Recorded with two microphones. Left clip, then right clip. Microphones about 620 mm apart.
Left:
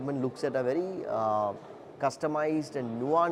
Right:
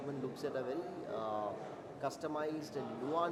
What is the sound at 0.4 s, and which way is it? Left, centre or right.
Speech, left.